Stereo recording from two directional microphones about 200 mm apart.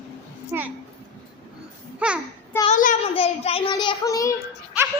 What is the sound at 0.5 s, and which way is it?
Speech, 10° right (ahead or behind).